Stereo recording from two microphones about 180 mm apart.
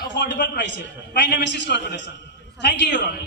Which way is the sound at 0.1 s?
80° left.